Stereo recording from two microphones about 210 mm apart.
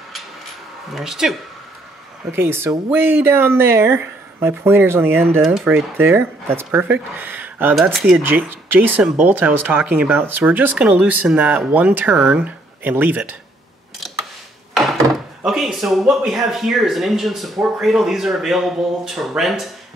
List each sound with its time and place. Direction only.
0.9 s speech: centre (ahead or behind)
2.3 s speech: 10° right (ahead or behind)
15.4 s speech: centre (ahead or behind)